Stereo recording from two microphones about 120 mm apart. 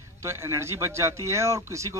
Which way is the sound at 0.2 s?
20° right (ahead or behind).